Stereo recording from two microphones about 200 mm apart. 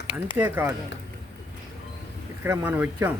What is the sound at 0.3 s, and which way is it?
Speech, 10° right (ahead or behind).